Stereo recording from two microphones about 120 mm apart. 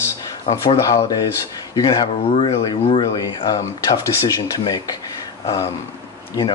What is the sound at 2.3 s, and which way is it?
Speech, 55° left (ahead or behind).